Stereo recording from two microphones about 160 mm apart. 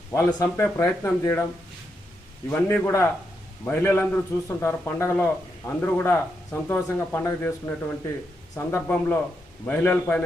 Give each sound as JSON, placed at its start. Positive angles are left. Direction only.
{"t": 0.1, "sound": "a man's voice", "side_deg": 20}
{"t": 2.5, "sound": "a man's voice", "side_deg": 10}